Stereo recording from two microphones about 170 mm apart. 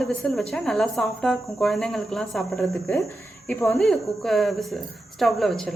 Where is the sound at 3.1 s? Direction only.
10° left (ahead or behind).